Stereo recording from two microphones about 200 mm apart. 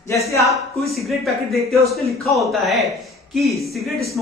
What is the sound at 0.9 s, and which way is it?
Speech, centre (ahead or behind).